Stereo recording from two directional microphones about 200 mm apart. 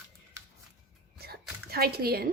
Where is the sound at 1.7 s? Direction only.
50° right (ahead or behind).